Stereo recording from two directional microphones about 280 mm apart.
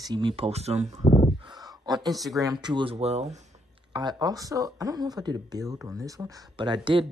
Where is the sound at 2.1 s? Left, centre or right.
Centre.